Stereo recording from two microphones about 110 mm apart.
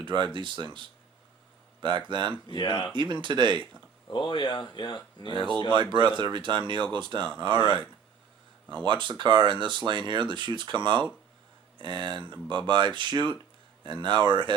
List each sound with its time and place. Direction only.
0.0 s speech: 45° right (ahead or behind)
2.5 s speech: 50° left (ahead or behind)
2.9 s speech: 45° right (ahead or behind)
4.1 s speech: 45° left (ahead or behind)
5.3 s speech: 45° right (ahead or behind)